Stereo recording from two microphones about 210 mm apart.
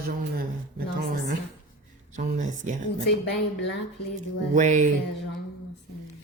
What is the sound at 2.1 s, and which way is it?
Speech, 35° right (ahead or behind).